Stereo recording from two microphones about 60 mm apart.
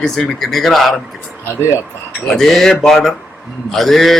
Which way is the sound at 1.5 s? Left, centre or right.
Left.